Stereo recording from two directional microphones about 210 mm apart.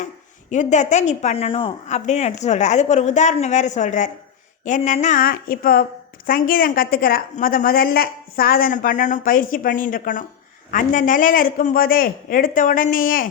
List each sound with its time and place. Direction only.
0.5 s a woman's voice: 35° left (ahead or behind)